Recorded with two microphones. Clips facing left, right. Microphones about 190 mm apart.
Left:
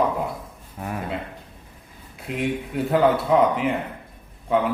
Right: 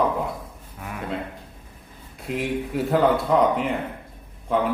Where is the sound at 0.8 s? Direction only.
35° left (ahead or behind).